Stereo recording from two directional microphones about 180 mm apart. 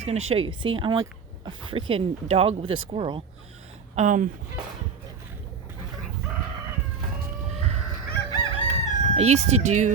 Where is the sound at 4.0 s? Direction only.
45° right (ahead or behind).